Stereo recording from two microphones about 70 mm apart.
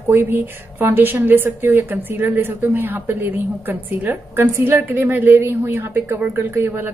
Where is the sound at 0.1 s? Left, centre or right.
Right.